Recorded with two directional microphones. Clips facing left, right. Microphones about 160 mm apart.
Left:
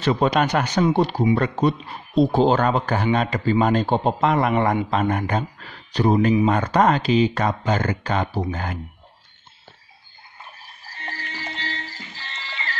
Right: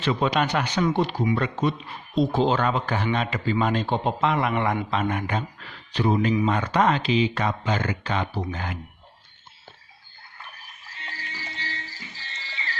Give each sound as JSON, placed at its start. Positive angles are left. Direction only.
{"t": 0.0, "sound": "speech", "side_deg": 40}
{"t": 10.4, "sound": "frog", "side_deg": 35}
{"t": 11.2, "sound": "music", "side_deg": 65}